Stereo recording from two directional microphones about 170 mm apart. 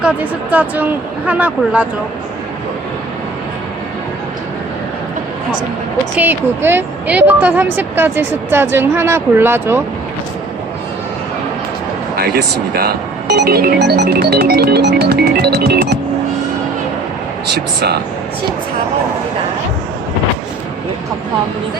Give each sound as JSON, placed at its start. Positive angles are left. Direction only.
{"t": 0.0, "sound": "speech", "side_deg": -10}
{"t": 6.1, "sound": "speech", "side_deg": -10}
{"t": 12.1, "sound": "speech", "side_deg": -65}
{"t": 17.5, "sound": "speech", "side_deg": -70}